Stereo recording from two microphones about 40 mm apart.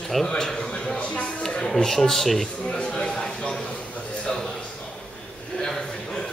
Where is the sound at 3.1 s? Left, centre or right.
Centre.